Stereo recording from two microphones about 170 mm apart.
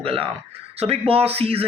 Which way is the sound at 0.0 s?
35° right (ahead or behind).